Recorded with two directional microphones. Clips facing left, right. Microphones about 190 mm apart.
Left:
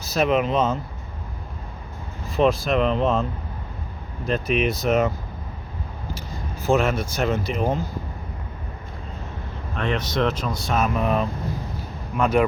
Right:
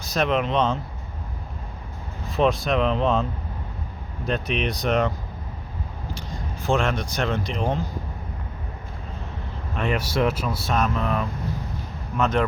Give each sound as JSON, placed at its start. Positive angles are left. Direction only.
{"t": 0.0, "sound": "speech", "side_deg": 5}
{"t": 2.3, "sound": "speech", "side_deg": 0}
{"t": 4.3, "sound": "speech", "side_deg": 0}
{"t": 6.1, "sound": "speech", "side_deg": 5}
{"t": 9.8, "sound": "speech", "side_deg": -10}
{"t": 10.8, "sound": "speech", "side_deg": 15}